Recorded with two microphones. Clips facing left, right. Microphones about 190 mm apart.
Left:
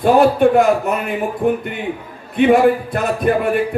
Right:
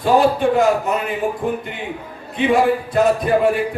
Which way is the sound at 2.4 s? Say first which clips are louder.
Left 4 dB; 55° left (ahead or behind).